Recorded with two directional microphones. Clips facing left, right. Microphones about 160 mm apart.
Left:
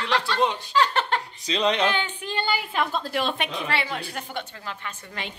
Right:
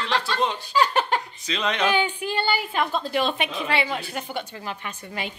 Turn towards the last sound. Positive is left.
turn(degrees=-10)  # may be behind; listen again after turning